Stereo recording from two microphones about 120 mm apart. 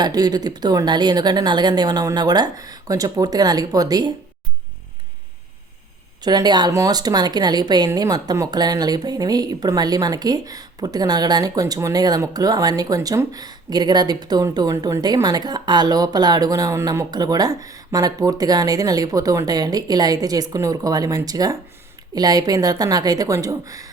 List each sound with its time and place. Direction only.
0.0 s speech: 35° right (ahead or behind)
6.2 s speech: 35° right (ahead or behind)